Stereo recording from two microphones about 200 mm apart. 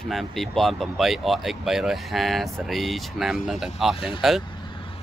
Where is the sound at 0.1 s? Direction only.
Centre (ahead or behind).